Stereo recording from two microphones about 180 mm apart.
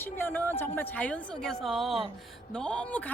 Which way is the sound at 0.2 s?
10° left (ahead or behind).